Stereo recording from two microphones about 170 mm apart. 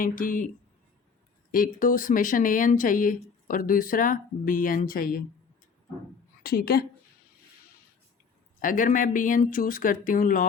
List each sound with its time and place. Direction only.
0.0 s speech: 55° left (ahead or behind)
1.5 s speech: 55° left (ahead or behind)
6.4 s a woman's voice: 65° left (ahead or behind)
8.6 s speech: 50° left (ahead or behind)